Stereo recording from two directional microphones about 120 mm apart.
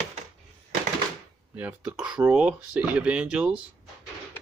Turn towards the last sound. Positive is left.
turn(degrees=-10)  # may be behind; listen again after turning